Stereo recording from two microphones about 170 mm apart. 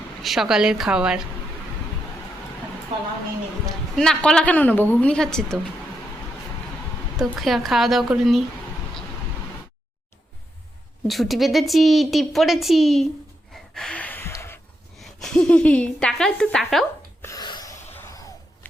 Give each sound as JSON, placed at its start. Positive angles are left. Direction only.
{"t": 0.2, "sound": "a woman's voice", "side_deg": 0}
{"t": 3.9, "sound": "a woman's voice", "side_deg": 5}
{"t": 7.2, "sound": "a woman's voice", "side_deg": 0}
{"t": 11.1, "sound": "a woman's voice", "side_deg": 0}
{"t": 13.5, "sound": "gasp", "side_deg": 5}
{"t": 14.9, "sound": "a woman's voice", "side_deg": 0}
{"t": 17.2, "sound": "gasp", "side_deg": 25}
{"t": 17.9, "sound": "a sound", "side_deg": 15}